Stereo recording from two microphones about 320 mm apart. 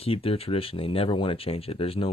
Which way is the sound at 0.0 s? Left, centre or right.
Centre.